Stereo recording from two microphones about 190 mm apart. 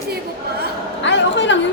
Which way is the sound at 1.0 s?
70° left (ahead or behind).